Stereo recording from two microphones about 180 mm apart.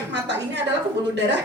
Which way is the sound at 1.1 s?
70° right (ahead or behind).